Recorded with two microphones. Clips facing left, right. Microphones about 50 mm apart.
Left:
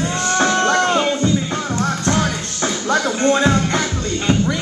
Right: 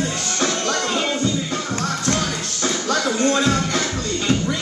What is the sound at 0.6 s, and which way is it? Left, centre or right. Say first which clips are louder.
Music: left 6 dB; left.